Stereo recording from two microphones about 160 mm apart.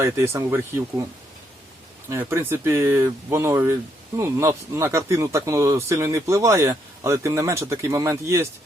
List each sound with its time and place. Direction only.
0.0 s speech: 15° right (ahead or behind)
2.0 s speech: 15° right (ahead or behind)